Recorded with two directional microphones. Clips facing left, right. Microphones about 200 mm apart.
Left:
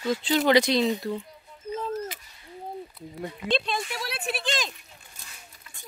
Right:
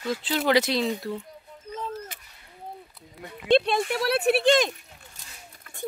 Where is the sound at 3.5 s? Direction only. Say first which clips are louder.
Right 8 dB; 60° right (ahead or behind).